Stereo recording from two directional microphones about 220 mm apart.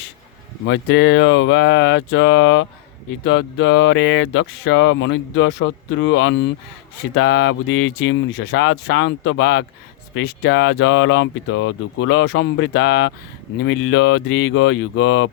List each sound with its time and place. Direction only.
0.7 s speech: 55° left (ahead or behind)